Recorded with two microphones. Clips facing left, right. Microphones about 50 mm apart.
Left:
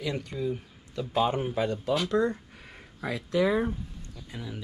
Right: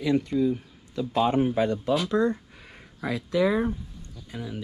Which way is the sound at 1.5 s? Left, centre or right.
Right.